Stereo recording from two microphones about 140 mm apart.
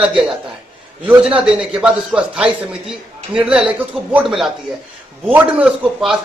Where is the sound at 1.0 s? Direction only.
5° right (ahead or behind).